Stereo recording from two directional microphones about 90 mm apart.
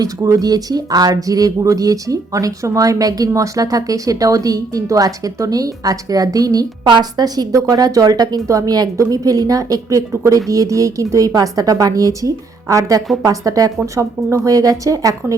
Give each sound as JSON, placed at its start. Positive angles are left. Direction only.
{"t": 0.0, "sound": "a woman's voice", "side_deg": -45}